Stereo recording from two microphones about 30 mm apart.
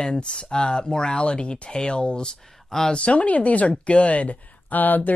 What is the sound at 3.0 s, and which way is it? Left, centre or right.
Speech, left.